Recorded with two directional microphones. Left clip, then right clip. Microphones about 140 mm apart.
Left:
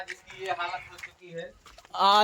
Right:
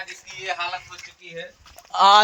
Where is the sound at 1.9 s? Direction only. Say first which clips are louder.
Right 7 dB; 45° right (ahead or behind).